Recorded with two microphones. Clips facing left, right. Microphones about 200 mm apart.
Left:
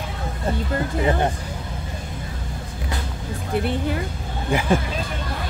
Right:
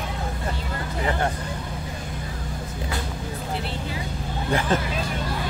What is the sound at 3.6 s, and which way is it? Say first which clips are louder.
Music: left 7 dB; 55° left (ahead or behind).